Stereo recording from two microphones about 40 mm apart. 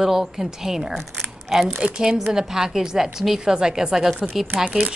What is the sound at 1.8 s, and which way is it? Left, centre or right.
A woman's voice, centre.